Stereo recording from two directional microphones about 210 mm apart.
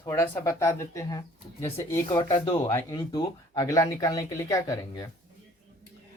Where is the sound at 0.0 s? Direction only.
15° left (ahead or behind).